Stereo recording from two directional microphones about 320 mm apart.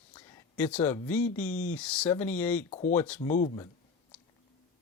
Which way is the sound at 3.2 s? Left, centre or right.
Left.